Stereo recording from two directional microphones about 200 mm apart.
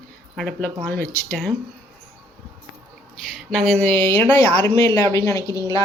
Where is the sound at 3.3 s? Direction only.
Centre (ahead or behind).